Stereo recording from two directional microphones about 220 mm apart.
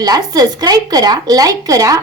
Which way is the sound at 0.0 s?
15° right (ahead or behind).